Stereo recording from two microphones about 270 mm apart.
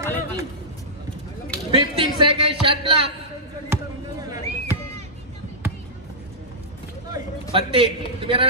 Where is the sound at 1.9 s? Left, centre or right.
Centre.